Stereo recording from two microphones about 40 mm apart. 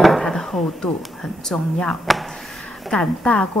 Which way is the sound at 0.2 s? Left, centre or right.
Centre.